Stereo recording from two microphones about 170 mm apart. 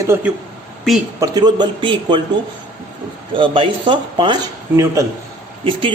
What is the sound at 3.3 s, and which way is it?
Speech, 30° right (ahead or behind).